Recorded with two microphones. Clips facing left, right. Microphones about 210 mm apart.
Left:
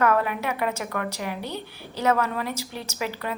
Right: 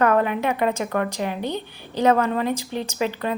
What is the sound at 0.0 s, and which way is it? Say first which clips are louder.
A woman's voice: right 4 dB; 30° right (ahead or behind).